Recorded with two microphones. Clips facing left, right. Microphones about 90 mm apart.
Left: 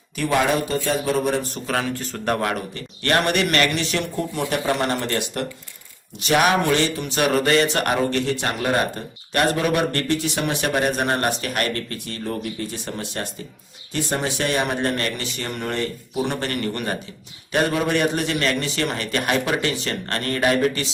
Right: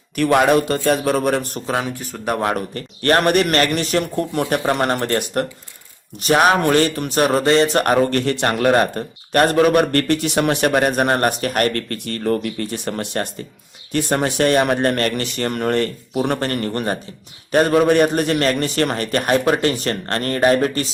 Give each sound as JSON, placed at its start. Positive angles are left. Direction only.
{"t": 0.2, "sound": "a man's voice", "side_deg": -60}
{"t": 1.6, "sound": "speech", "side_deg": -20}
{"t": 2.1, "sound": "speech", "side_deg": -10}
{"t": 2.7, "sound": "a man's voice", "side_deg": -40}
{"t": 7.3, "sound": "a sound", "side_deg": -30}
{"t": 8.2, "sound": "a man's voice", "side_deg": -60}